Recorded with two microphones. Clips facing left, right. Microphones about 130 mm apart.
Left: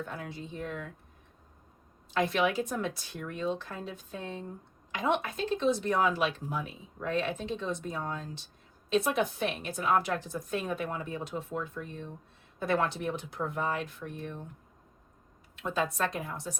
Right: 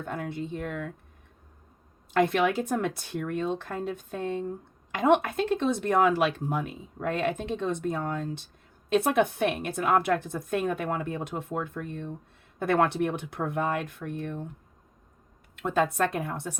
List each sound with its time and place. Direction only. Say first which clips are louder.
0.0 s speech: right 6 dB; 55° right (ahead or behind)
2.1 s speech: right 4 dB; 55° right (ahead or behind)
15.5 s speech: right 6 dB; 55° right (ahead or behind)